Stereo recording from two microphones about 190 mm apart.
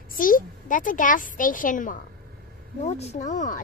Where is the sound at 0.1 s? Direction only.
45° left (ahead or behind).